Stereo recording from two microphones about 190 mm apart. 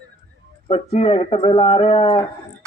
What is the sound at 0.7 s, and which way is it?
Speech, 30° left (ahead or behind).